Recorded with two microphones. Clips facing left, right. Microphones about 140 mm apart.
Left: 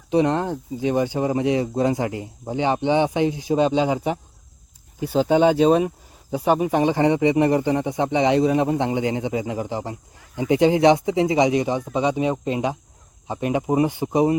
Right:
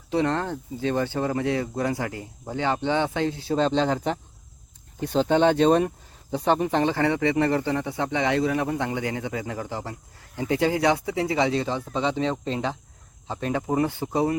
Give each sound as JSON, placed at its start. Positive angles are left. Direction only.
{"t": 0.1, "sound": "speech", "side_deg": 15}